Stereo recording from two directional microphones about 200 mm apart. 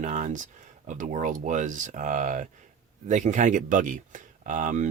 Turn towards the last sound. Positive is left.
turn(degrees=-40)  # may be behind; listen again after turning